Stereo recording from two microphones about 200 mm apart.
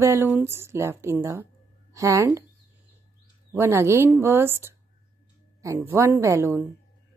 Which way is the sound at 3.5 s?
10° right (ahead or behind).